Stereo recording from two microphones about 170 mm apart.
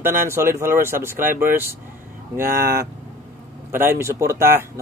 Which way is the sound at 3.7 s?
15° right (ahead or behind).